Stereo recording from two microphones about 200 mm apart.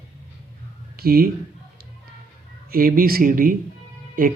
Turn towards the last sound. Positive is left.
turn(degrees=-45)  # may be behind; listen again after turning